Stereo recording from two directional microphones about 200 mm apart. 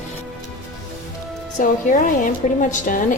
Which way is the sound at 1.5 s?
40° left (ahead or behind).